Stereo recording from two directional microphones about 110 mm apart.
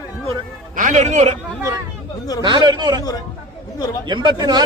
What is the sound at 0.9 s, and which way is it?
Speech, 90° right.